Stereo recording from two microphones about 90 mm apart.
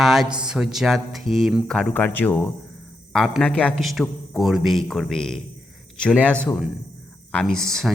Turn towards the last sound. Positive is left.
turn(degrees=5)  # may be behind; listen again after turning